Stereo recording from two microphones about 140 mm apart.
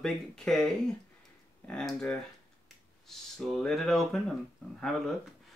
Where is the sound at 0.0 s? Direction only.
5° left (ahead or behind).